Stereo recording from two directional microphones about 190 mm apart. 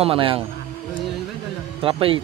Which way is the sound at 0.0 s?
30° right (ahead or behind).